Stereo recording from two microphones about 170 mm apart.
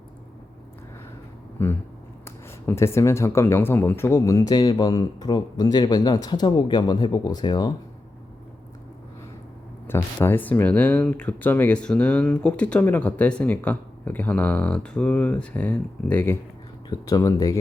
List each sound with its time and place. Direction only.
1.6 s speech: 15° left (ahead or behind)
9.8 s speech: 15° left (ahead or behind)